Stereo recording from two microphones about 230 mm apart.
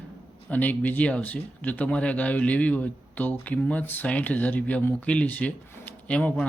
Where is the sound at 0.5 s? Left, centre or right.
Centre.